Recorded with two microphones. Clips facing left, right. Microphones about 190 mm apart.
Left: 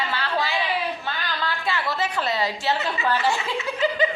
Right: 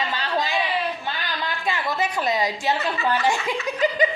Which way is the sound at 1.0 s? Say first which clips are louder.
Even; 15° right (ahead or behind).